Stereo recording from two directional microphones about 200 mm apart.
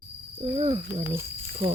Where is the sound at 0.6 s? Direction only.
30° right (ahead or behind).